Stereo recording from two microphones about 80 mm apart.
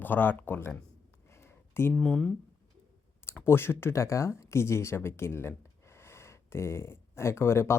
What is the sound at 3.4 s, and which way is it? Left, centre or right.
Speech, left.